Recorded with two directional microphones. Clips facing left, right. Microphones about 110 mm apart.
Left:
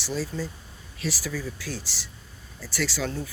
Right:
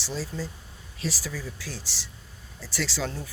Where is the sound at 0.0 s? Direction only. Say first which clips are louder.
Left 3 dB; 30° right (ahead or behind).